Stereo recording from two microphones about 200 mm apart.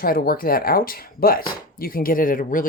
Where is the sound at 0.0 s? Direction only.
45° left (ahead or behind).